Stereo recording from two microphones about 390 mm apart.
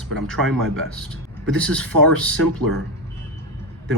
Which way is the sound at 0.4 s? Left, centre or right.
Right.